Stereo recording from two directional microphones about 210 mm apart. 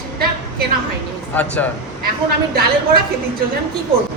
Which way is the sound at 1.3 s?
10° left (ahead or behind).